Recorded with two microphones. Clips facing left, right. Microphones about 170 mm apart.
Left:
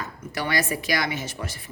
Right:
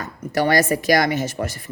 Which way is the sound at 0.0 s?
45° right (ahead or behind).